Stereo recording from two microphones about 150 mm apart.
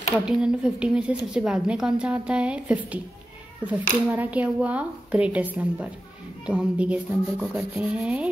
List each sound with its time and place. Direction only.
0.2 s a woman's voice: 5° right (ahead or behind)